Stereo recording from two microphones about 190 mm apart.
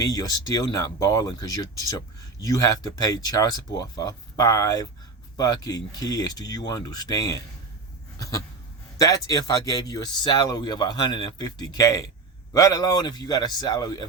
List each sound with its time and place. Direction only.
0.0 s speech: 20° left (ahead or behind)
9.0 s speech: 20° left (ahead or behind)